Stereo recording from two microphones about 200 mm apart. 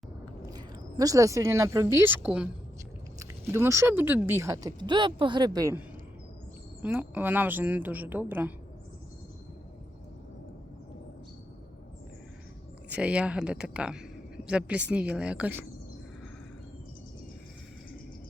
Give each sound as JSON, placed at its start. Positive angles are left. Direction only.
{"t": 0.5, "sound": "speech", "side_deg": -20}
{"t": 6.8, "sound": "speech", "side_deg": -5}
{"t": 13.0, "sound": "speech", "side_deg": -5}